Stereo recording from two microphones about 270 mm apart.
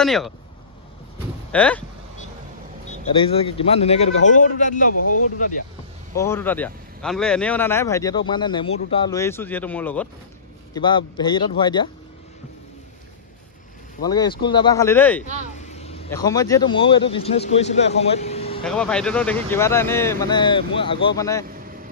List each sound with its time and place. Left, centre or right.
0.0 s speech: centre
1.5 s speech: centre
2.9 s a man's voice: left
4.9 s speech: left
6.1 s speech: centre
10.7 s speech: centre
14.0 s speech: centre
15.5 s vehicle: left
16.1 s speech: centre
18.6 s speech: centre